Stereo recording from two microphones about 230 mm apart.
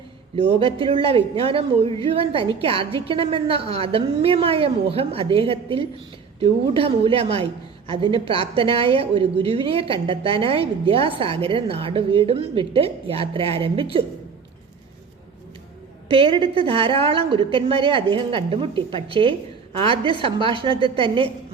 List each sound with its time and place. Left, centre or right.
0.3 s a woman's voice: right
16.0 s a woman's voice: right